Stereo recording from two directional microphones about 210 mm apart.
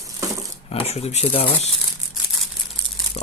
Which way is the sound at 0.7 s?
30° left (ahead or behind).